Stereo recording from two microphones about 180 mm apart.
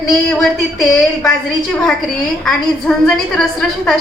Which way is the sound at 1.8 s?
Centre (ahead or behind).